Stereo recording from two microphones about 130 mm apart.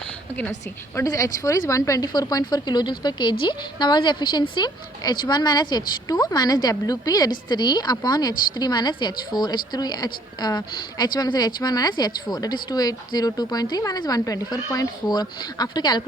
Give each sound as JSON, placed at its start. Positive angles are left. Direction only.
{"t": 0.9, "sound": "speech", "side_deg": 25}